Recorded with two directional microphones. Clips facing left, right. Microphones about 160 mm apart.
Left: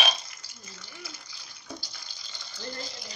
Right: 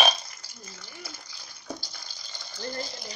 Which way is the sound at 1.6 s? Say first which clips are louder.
Right 4 dB; 40° right (ahead or behind).